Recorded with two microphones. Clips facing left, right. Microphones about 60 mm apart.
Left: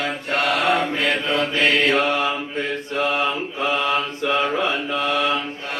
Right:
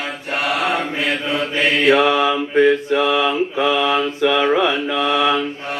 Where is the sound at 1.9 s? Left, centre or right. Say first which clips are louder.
Right 6 dB; right.